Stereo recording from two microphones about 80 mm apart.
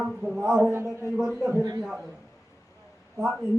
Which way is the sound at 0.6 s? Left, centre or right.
Right.